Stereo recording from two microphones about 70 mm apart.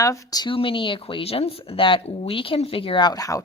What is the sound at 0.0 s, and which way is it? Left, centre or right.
Speech, left.